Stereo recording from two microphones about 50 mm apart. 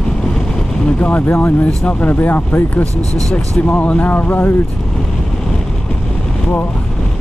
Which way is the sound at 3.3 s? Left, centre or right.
Left.